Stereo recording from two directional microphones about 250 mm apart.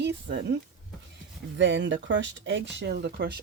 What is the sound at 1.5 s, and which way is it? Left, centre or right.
Speech, right.